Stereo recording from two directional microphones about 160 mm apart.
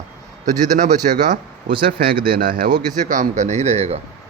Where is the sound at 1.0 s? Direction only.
45° right (ahead or behind).